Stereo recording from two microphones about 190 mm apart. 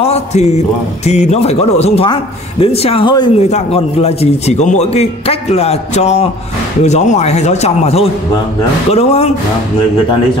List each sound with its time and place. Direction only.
0.0 s a man's voice: 35° left (ahead or behind)